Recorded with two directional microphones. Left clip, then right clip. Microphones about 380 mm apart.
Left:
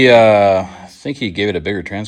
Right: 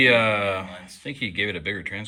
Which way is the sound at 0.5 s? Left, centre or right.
Centre.